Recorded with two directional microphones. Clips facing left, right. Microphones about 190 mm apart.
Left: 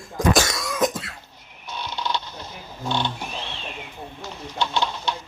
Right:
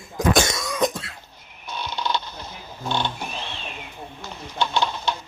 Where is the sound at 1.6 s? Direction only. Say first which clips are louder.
Right 1 dB; 50° right (ahead or behind).